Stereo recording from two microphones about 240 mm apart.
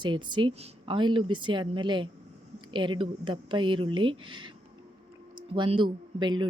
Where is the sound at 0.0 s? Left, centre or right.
Centre.